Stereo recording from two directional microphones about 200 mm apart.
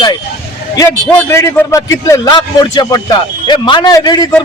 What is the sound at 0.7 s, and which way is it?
A man's voice, 10° left (ahead or behind).